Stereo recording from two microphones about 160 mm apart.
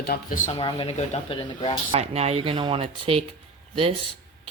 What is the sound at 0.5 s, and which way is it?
Speech, 35° left (ahead or behind).